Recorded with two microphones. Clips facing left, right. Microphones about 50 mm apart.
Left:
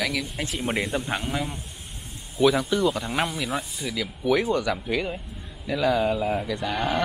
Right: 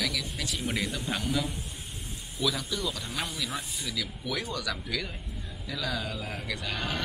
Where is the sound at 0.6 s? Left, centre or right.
Left.